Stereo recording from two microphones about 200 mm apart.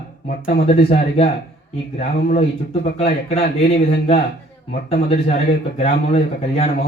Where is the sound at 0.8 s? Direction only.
30° left (ahead or behind).